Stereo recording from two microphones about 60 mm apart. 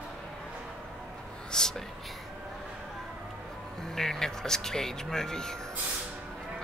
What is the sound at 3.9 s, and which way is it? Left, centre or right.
Speech, centre.